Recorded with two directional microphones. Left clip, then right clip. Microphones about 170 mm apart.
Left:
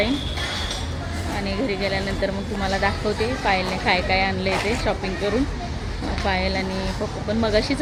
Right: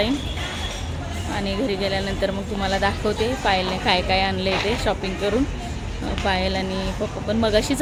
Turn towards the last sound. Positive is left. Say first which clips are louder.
# right 1 dB
turn(degrees=-15)  # may be behind; listen again after turning